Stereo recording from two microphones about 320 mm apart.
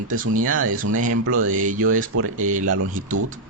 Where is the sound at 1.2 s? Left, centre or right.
Right.